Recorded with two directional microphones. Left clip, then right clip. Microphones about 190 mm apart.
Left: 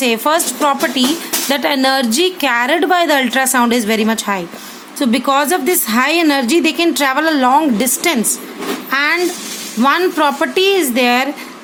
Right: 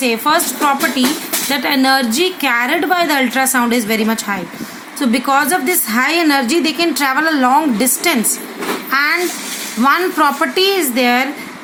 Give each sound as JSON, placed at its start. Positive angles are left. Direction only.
{"t": 0.0, "sound": "a woman's voice", "side_deg": 40}
{"t": 8.9, "sound": "a sound", "side_deg": 30}
{"t": 9.8, "sound": "a woman's voice", "side_deg": 25}